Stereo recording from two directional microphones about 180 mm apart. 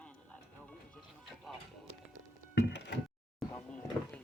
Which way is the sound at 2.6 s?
75° left (ahead or behind).